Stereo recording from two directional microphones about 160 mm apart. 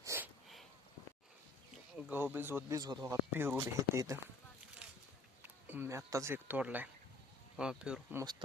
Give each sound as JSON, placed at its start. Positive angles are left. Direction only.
{"t": 0.0, "sound": "a sound", "side_deg": -20}
{"t": 1.7, "sound": "speech", "side_deg": -10}
{"t": 3.3, "sound": "speech", "side_deg": -15}
{"t": 4.8, "sound": "a sound", "side_deg": -5}
{"t": 5.4, "sound": "speech", "side_deg": -10}
{"t": 8.1, "sound": "speech", "side_deg": -25}